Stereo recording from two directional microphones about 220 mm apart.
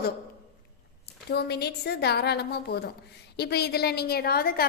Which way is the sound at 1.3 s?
45° left (ahead or behind).